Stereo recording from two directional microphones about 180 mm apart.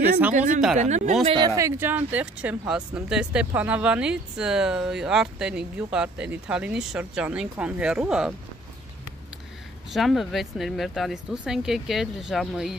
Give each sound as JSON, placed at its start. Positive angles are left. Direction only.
{"t": 0.3, "sound": "a woman's voice", "side_deg": -45}
{"t": 1.2, "sound": "speech", "side_deg": -25}
{"t": 9.8, "sound": "speech", "side_deg": 0}